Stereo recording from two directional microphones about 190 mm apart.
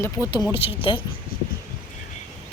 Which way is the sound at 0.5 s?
30° left (ahead or behind).